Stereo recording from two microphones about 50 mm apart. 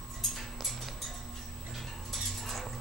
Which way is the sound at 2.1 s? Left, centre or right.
Centre.